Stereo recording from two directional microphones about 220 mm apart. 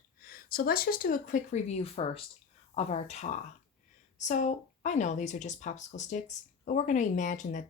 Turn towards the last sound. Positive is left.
turn(degrees=35)  # may be behind; listen again after turning